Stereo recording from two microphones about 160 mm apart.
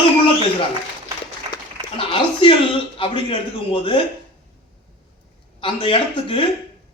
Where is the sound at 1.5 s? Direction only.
35° left (ahead or behind).